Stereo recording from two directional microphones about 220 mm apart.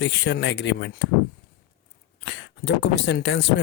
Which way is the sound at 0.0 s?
55° left (ahead or behind).